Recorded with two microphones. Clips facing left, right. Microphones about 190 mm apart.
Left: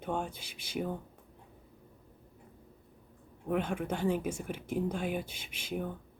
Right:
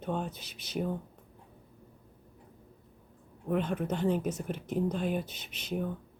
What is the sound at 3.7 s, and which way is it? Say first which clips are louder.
Speech: right 2 dB; 10° left (ahead or behind).